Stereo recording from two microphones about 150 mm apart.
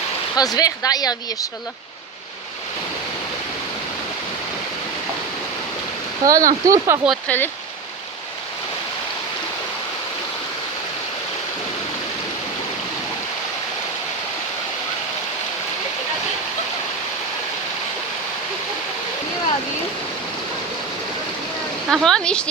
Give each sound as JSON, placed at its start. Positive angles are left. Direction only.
{"t": 0.3, "sound": "speech", "side_deg": 25}
{"t": 6.2, "sound": "speech", "side_deg": -25}
{"t": 7.3, "sound": "speech", "side_deg": 15}
{"t": 21.8, "sound": "speech", "side_deg": 0}